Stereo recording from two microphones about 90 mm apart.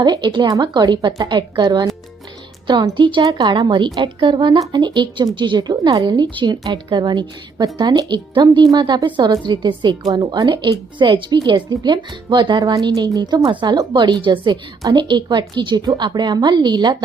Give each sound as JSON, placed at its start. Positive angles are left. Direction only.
{"t": 0.0, "sound": "a woman's voice", "side_deg": -55}
{"t": 3.0, "sound": "a woman's voice", "side_deg": -60}
{"t": 3.3, "sound": "a woman's voice", "side_deg": -50}
{"t": 9.0, "sound": "a woman's voice", "side_deg": -60}
{"t": 13.4, "sound": "a woman's voice", "side_deg": -65}